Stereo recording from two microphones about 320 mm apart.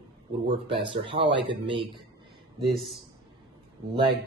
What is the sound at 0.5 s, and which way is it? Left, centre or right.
Speech, centre.